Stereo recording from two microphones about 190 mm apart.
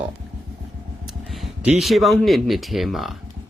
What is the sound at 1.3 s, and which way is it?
Speech, 5° right (ahead or behind).